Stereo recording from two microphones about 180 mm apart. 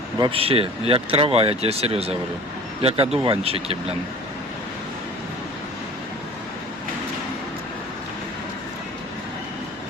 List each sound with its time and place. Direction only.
0.2 s speech: 30° right (ahead or behind)